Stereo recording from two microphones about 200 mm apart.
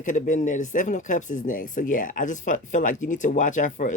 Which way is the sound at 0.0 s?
40° left (ahead or behind).